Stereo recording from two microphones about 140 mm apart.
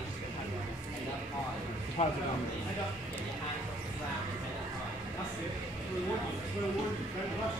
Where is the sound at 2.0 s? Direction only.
55° left (ahead or behind).